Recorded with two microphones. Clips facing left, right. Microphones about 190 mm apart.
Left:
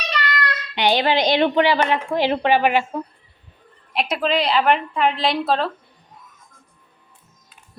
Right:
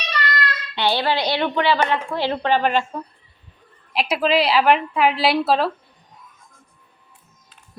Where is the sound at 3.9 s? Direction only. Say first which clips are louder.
Right 2 dB; centre (ahead or behind).